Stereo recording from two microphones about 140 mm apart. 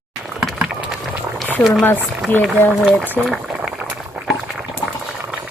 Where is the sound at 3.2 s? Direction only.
5° right (ahead or behind).